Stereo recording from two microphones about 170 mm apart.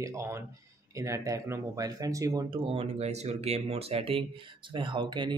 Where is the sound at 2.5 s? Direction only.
30° right (ahead or behind).